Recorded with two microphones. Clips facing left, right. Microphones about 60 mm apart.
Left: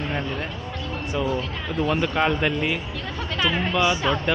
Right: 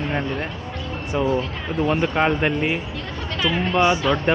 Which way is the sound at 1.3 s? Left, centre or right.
Centre.